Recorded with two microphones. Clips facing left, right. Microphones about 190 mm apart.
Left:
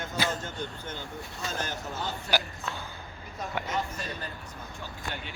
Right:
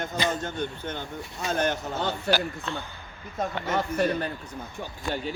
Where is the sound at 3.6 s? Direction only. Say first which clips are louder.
Right 8 dB; 65° right (ahead or behind).